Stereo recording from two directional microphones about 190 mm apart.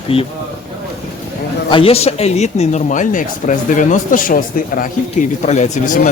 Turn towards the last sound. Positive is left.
turn(degrees=40)  # may be behind; listen again after turning